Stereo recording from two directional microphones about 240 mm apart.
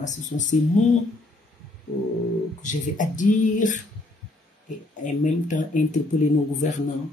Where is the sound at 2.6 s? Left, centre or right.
Left.